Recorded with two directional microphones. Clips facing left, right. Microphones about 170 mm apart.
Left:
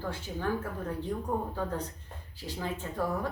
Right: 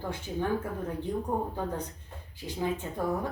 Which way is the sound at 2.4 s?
20° right (ahead or behind).